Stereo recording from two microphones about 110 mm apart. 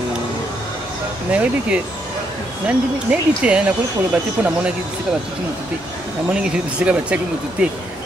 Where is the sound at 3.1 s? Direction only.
10° right (ahead or behind).